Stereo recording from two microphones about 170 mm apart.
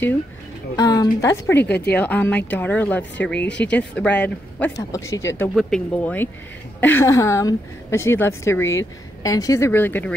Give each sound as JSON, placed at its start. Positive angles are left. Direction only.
{"t": 0.7, "sound": "a woman's voice", "side_deg": 20}
{"t": 4.7, "sound": "speech", "side_deg": 20}
{"t": 5.5, "sound": "speech", "side_deg": 5}